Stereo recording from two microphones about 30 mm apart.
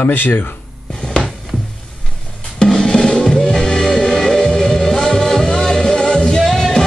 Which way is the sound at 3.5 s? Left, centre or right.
Centre.